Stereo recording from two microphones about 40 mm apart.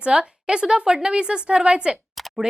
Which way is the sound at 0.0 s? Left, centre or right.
Right.